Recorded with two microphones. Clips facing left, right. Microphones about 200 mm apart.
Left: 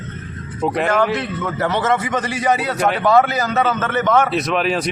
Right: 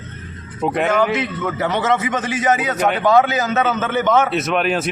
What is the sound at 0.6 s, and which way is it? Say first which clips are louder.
A man's voice: even; centre (ahead or behind).